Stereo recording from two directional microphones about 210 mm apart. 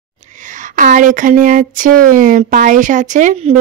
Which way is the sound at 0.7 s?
40° right (ahead or behind).